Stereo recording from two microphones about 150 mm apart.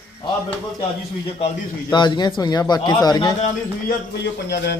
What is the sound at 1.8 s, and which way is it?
Speech, 30° left (ahead or behind).